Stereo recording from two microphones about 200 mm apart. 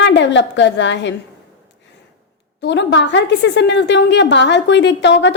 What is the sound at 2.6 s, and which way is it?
A woman's voice, 60° left (ahead or behind).